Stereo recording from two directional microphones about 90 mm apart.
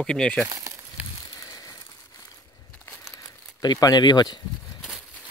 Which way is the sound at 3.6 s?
45° left (ahead or behind).